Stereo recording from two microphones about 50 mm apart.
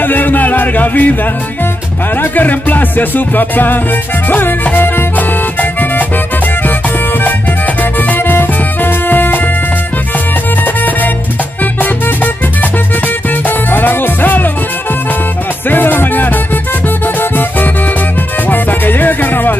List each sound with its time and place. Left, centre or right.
0.0 s music: left
2.3 s music: left
7.2 s music: left
10.6 s music: left
13.3 s music: left
15.7 s music: left